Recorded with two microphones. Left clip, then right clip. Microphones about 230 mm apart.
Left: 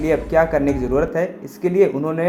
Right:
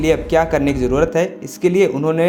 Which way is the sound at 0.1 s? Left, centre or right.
Right.